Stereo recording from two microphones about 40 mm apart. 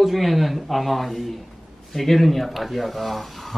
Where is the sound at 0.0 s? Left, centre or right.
Centre.